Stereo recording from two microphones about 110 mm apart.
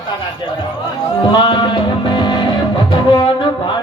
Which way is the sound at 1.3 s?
45° left (ahead or behind).